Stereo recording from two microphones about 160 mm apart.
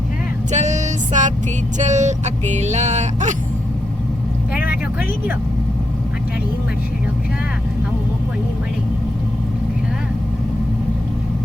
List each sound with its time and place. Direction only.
0.5 s music: 45° right (ahead or behind)
1.8 s speech: 45° right (ahead or behind)